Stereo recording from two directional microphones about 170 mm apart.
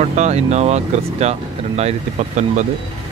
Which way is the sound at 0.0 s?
40° right (ahead or behind).